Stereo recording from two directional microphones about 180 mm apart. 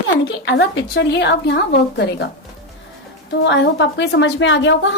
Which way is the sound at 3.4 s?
75° left (ahead or behind).